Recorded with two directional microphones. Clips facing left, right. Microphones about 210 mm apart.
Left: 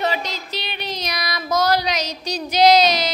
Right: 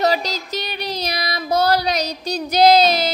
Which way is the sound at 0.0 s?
35° right (ahead or behind).